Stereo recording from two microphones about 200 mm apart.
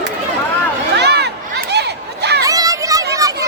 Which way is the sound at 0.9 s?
55° right (ahead or behind).